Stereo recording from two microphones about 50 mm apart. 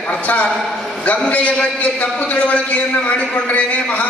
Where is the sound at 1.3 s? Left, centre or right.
Left.